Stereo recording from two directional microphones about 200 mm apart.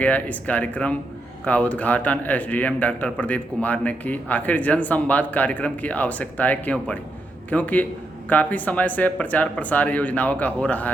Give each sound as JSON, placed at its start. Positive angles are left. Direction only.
{"t": 0.0, "sound": "a man's voice", "side_deg": 5}